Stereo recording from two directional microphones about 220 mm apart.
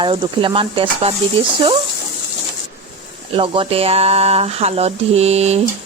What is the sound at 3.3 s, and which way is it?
Speech, 25° right (ahead or behind).